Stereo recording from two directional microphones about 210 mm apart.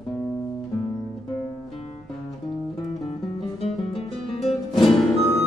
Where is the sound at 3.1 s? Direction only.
30° left (ahead or behind).